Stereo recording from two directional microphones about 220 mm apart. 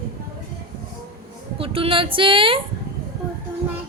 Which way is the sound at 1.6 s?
25° right (ahead or behind).